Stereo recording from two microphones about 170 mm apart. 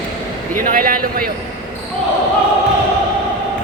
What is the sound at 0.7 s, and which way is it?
Speech, 55° right (ahead or behind).